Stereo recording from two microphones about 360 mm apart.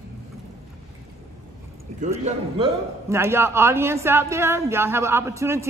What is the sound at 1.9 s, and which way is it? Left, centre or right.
Speech, centre.